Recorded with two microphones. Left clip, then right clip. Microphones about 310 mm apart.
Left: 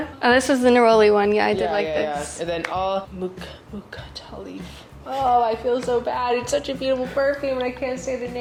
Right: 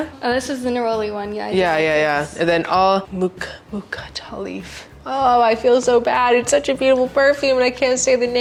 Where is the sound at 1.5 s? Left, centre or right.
Right.